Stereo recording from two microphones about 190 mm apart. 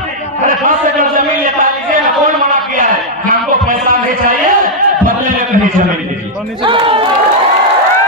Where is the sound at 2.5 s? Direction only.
45° right (ahead or behind).